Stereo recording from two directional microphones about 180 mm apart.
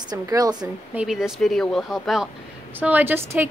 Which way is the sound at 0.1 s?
20° right (ahead or behind).